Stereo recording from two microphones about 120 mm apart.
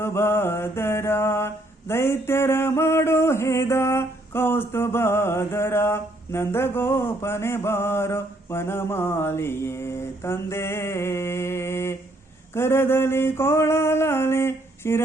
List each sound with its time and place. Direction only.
0.0 s mantra: 20° left (ahead or behind)